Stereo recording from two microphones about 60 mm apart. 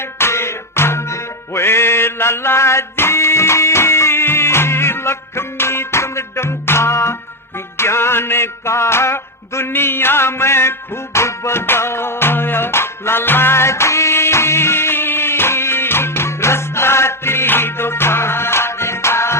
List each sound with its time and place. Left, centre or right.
0.2 s music: left